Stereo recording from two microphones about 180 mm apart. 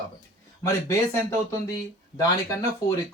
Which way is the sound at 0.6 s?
15° left (ahead or behind).